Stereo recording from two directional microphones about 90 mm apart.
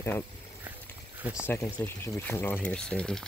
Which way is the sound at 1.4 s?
25° left (ahead or behind).